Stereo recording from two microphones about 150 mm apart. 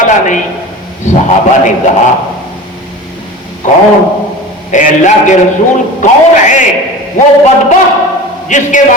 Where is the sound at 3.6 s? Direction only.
60° left (ahead or behind).